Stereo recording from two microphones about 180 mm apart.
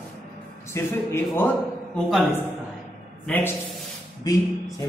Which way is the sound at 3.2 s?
10° left (ahead or behind).